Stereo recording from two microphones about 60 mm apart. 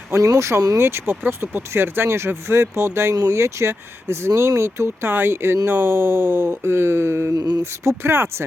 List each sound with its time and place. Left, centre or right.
0.2 s speech: right
0.8 s speech: right
7.3 s mantra: right
7.6 s speech: right